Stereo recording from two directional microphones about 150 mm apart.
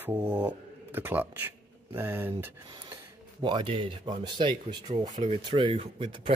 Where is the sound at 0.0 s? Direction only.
15° right (ahead or behind).